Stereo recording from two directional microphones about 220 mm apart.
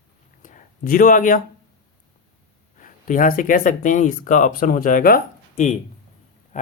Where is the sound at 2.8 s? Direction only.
35° left (ahead or behind).